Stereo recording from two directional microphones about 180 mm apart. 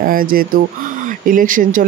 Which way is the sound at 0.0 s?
55° right (ahead or behind).